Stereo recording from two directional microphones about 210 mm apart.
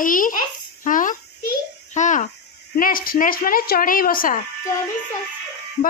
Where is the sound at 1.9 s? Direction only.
35° left (ahead or behind).